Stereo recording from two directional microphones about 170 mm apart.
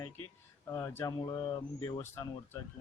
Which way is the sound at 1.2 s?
25° left (ahead or behind).